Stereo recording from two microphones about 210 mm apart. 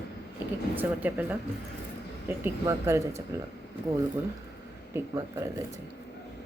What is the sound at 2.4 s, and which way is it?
Speech, 10° right (ahead or behind).